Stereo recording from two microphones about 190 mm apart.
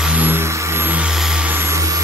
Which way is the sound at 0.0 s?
10° right (ahead or behind).